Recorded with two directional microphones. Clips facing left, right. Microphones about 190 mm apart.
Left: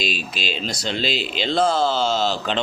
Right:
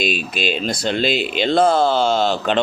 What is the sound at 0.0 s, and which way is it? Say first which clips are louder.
Speech: right 6 dB; 55° right (ahead or behind).